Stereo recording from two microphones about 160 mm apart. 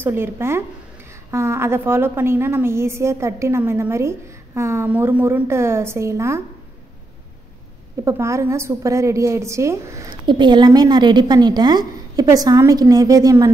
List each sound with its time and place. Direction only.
0.0 s a woman's voice: 15° right (ahead or behind)
8.0 s a woman's voice: 20° right (ahead or behind)